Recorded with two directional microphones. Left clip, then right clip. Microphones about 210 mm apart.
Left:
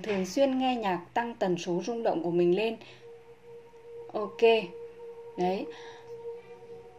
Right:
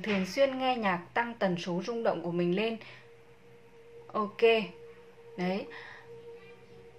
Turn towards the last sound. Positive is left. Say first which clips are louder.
# left 4 dB
turn(degrees=35)  # may be behind; listen again after turning